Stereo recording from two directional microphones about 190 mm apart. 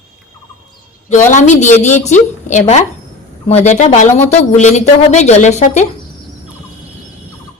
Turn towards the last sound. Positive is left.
turn(degrees=40)  # may be behind; listen again after turning